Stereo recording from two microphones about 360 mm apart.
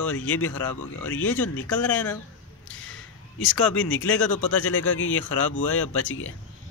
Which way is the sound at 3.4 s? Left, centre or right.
Left.